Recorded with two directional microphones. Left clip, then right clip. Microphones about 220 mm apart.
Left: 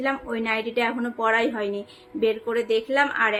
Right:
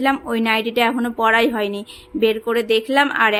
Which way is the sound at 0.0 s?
45° right (ahead or behind).